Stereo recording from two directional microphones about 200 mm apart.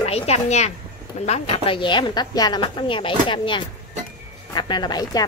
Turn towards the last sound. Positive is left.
turn(degrees=20)  # may be behind; listen again after turning